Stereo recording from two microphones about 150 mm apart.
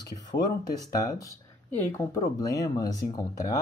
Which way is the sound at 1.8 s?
15° left (ahead or behind).